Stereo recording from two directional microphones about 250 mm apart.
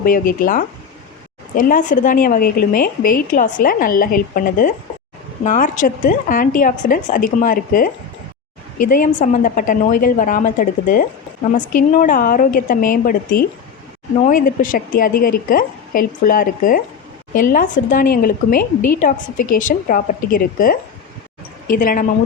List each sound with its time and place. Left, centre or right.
0.0 s a woman's voice: left
8.9 s a woman's voice: left